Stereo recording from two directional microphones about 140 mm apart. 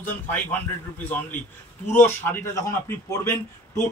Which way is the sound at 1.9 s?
15° left (ahead or behind).